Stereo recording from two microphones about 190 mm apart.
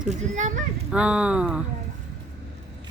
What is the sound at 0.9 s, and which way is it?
Speech, 5° right (ahead or behind).